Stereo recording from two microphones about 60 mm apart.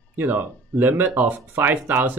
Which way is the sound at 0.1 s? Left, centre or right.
Right.